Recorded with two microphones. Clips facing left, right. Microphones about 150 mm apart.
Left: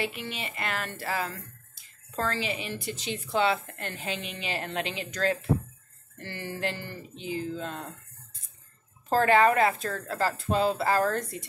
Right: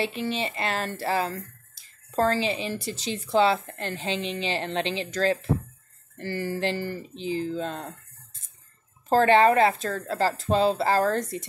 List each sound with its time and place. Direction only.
0.0 s a woman's voice: 30° right (ahead or behind)
9.1 s a woman's voice: 30° right (ahead or behind)